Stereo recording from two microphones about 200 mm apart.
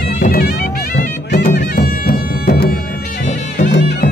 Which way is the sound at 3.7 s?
55° left (ahead or behind).